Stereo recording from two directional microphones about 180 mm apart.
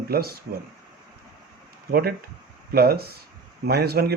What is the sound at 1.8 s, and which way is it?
Speech, 55° right (ahead or behind).